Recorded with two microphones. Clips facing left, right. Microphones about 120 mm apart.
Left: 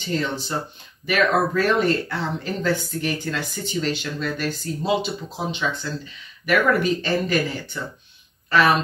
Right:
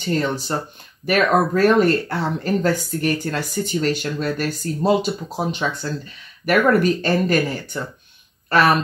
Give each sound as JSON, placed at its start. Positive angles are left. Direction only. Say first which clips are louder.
{"t": 0.0, "sound": "speech", "louder": "right 4 dB", "side_deg": -50}